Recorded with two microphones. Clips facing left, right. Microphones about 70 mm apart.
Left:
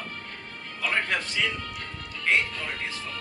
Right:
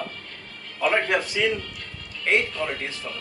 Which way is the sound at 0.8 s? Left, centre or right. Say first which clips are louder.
Right 6 dB; centre.